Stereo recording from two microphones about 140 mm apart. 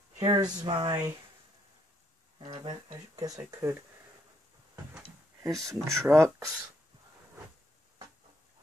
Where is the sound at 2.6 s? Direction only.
30° right (ahead or behind).